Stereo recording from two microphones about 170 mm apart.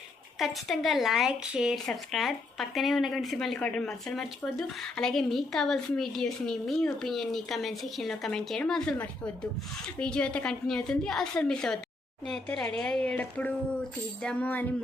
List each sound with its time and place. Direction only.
0.3 s speech: centre (ahead or behind)
14.2 s child singing: 5° left (ahead or behind)